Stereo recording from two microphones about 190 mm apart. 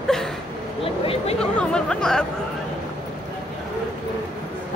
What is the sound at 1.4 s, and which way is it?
Speech, 5° left (ahead or behind).